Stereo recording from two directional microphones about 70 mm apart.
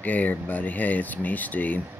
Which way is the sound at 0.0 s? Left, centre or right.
Left.